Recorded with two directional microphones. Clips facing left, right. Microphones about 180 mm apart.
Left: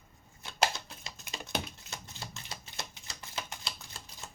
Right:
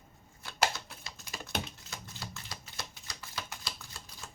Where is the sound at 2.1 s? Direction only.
25° left (ahead or behind).